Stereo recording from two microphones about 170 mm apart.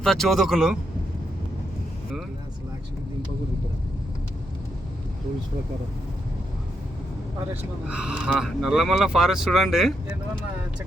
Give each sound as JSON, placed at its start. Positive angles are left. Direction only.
{"t": 0.0, "sound": "speech", "side_deg": 0}
{"t": 7.5, "sound": "speech", "side_deg": -5}